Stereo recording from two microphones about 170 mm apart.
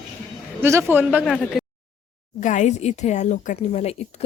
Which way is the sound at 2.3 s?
45° left (ahead or behind).